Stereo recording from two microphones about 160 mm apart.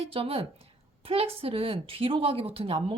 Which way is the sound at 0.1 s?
35° right (ahead or behind).